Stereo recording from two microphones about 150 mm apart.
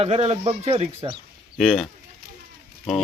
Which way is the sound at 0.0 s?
45° right (ahead or behind).